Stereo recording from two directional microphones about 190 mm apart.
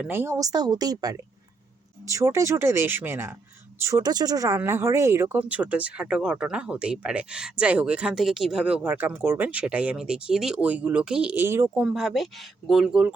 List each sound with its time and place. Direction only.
0.0 s speech: 10° right (ahead or behind)
11.9 s speech: centre (ahead or behind)